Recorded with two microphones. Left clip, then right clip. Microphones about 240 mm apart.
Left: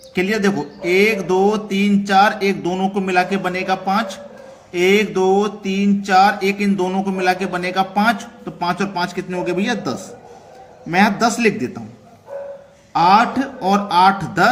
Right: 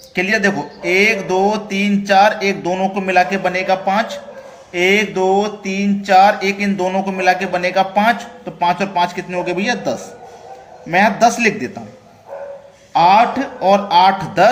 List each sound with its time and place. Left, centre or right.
0.1 s mantra: left
12.9 s mantra: left